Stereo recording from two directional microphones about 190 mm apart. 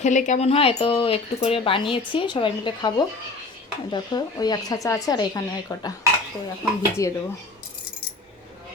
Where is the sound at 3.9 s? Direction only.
20° left (ahead or behind).